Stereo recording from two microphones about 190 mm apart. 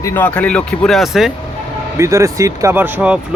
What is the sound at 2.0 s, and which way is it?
Speech, 15° right (ahead or behind).